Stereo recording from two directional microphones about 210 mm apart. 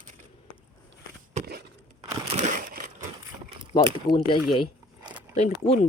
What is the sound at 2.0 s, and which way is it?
Crushing, 30° right (ahead or behind).